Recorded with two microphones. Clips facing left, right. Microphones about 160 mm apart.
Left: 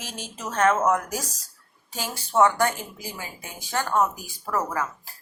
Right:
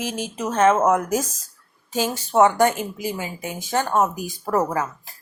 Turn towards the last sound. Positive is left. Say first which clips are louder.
# right 6 dB
turn(degrees=-20)  # may be behind; listen again after turning